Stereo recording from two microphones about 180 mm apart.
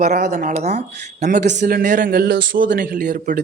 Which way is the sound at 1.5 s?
55° right (ahead or behind).